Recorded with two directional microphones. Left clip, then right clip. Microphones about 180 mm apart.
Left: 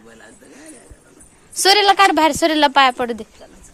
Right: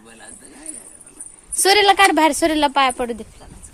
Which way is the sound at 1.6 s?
15° right (ahead or behind).